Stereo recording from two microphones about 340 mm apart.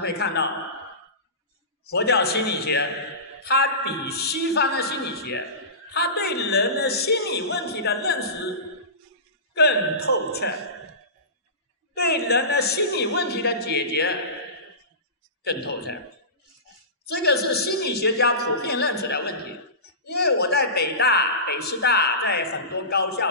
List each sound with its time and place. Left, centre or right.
0.0 s speech: left
1.9 s speech: left
9.5 s speech: left
11.9 s speech: left
15.4 s speech: left
17.1 s speech: left